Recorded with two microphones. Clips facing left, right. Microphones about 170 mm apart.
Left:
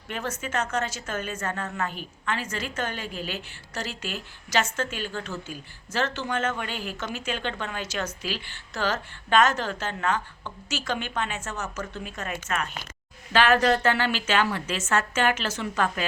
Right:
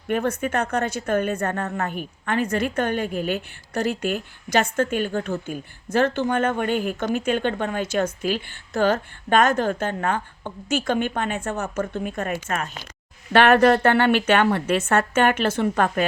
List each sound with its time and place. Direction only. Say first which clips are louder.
0.1 s speech: right 8 dB; 55° right (ahead or behind)
1.6 s speech: right 4 dB; 40° right (ahead or behind)
1.9 s a woman's voice: right 5 dB; 55° right (ahead or behind)
12.3 s speech: right 4 dB; 35° right (ahead or behind)
13.3 s speech: right 6 dB; 60° right (ahead or behind)